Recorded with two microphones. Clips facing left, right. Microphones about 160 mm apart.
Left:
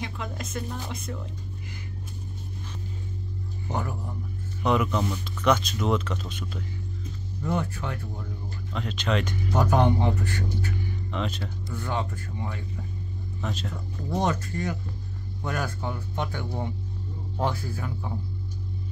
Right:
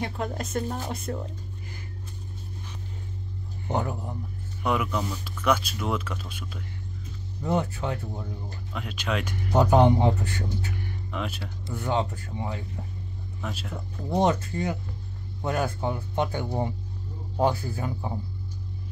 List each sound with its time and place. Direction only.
0.0 s speech: 40° right (ahead or behind)
3.6 s speech: 20° right (ahead or behind)
4.6 s speech: 5° right (ahead or behind)
7.4 s speech: 20° right (ahead or behind)
8.7 s speech: 10° right (ahead or behind)
9.6 s speech: 20° right (ahead or behind)
11.1 s speech: 5° right (ahead or behind)
11.6 s speech: 20° right (ahead or behind)
13.4 s speech: 5° right (ahead or behind)
14.0 s speech: 20° right (ahead or behind)